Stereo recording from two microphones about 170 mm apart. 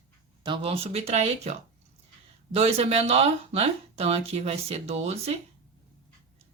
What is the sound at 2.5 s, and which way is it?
Speech, 35° right (ahead or behind).